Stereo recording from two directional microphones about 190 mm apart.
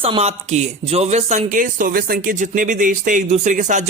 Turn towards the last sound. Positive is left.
turn(degrees=-40)  # may be behind; listen again after turning